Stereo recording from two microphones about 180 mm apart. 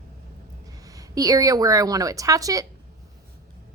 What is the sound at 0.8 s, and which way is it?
A woman's voice, 20° right (ahead or behind).